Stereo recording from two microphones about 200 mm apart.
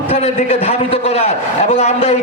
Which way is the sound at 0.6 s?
30° left (ahead or behind).